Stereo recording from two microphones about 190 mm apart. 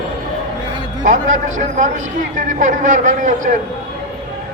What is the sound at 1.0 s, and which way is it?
A man's voice, 40° right (ahead or behind).